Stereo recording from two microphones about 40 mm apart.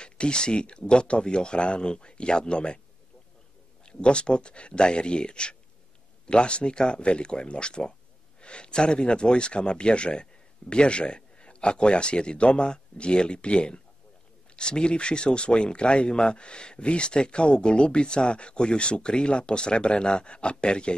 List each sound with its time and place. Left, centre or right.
0.0 s speech: left
3.8 s speech: left